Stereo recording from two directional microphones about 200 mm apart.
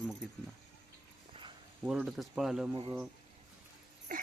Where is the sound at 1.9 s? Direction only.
Centre (ahead or behind).